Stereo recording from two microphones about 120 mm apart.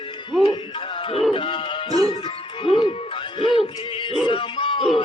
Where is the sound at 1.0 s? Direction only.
50° left (ahead or behind).